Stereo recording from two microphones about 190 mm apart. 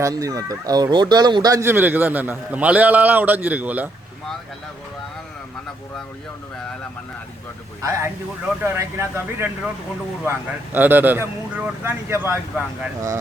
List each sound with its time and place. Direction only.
0.0 s speech: 15° right (ahead or behind)
7.8 s speech: 15° right (ahead or behind)